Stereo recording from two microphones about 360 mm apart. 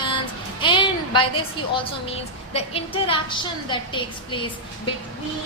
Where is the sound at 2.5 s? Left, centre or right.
Centre.